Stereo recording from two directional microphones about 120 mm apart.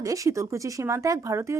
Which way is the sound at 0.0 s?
25° right (ahead or behind).